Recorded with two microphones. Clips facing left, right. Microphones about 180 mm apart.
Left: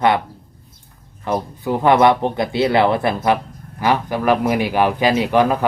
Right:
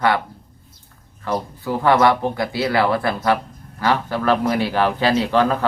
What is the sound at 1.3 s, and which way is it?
Speech, 20° left (ahead or behind).